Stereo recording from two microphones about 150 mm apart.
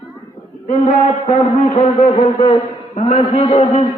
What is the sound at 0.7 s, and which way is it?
A man's voice, 45° left (ahead or behind).